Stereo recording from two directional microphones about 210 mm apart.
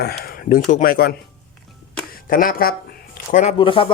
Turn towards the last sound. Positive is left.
turn(degrees=25)  # may be behind; listen again after turning